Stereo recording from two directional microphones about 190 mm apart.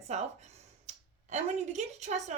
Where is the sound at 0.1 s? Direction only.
35° right (ahead or behind).